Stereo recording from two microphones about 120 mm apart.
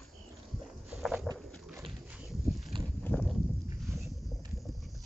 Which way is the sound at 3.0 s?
10° left (ahead or behind).